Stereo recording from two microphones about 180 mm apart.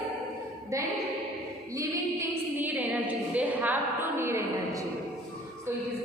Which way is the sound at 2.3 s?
10° right (ahead or behind).